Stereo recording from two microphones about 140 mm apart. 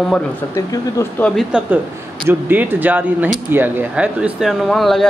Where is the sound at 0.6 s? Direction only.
25° left (ahead or behind).